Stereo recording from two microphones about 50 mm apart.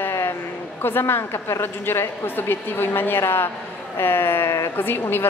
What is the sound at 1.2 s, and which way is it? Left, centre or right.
Speech, left.